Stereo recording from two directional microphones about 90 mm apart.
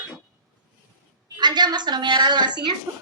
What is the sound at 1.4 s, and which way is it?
A woman's voice, 55° right (ahead or behind).